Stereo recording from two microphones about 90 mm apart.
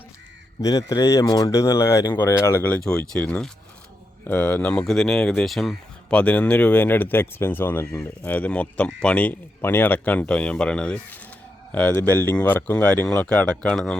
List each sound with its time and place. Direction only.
0.6 s speech: 40° left (ahead or behind); by 5.7 s centre (ahead or behind)
6.1 s speech: 15° left (ahead or behind)
8.2 s speech: 15° left (ahead or behind)